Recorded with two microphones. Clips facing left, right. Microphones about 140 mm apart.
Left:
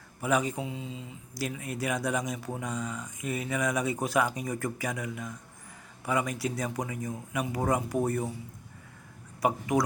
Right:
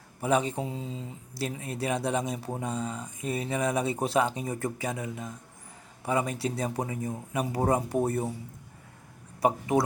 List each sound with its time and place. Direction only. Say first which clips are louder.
0.2 s speech: right 2 dB; 30° right (ahead or behind)
9.4 s speech: right 2 dB; 30° right (ahead or behind)